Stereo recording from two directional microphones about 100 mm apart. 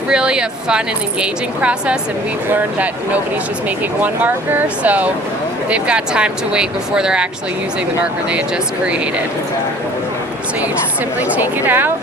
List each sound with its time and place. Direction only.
0.1 s speech: 10° right (ahead or behind)
11.2 s a woman's voice: 15° right (ahead or behind)